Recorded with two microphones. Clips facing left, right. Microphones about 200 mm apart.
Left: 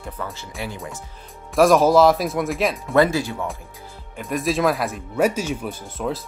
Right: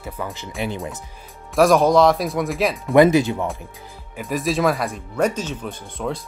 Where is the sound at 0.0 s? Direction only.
15° right (ahead or behind).